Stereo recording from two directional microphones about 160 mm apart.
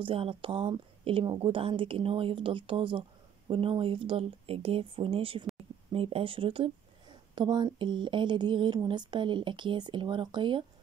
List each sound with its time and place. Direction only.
0.0 s a woman's voice: 35° right (ahead or behind)